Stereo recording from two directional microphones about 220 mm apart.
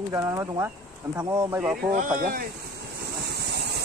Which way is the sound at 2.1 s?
40° right (ahead or behind).